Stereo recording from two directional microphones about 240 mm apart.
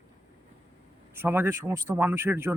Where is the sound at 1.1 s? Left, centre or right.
Centre.